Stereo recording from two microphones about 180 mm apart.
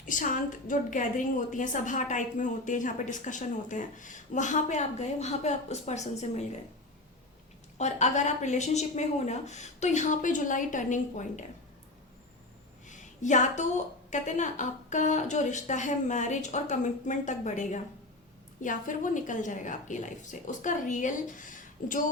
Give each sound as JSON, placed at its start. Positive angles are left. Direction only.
{"t": 0.0, "sound": "a woman's voice", "side_deg": 45}
{"t": 7.8, "sound": "a woman's voice", "side_deg": 40}
{"t": 12.9, "sound": "a sound", "side_deg": 45}
{"t": 14.1, "sound": "a woman's voice", "side_deg": 45}